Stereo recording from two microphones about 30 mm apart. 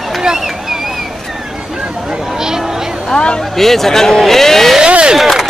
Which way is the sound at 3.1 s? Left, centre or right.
Left.